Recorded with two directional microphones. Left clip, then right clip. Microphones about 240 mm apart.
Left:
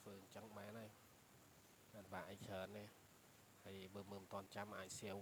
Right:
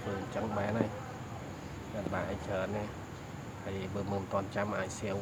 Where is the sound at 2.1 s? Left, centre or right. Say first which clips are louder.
Right 16 dB; left.